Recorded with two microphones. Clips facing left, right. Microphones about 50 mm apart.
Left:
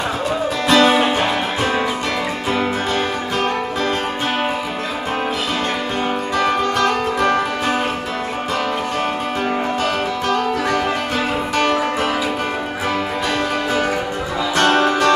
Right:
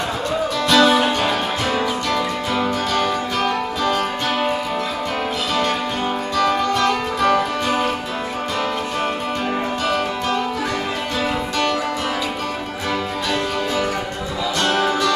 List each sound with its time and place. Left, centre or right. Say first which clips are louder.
0.7 s music: left 1 dB; left
6.3 s music: even; left
11.5 s music: left 5 dB; left
14.6 s music: left 4 dB; left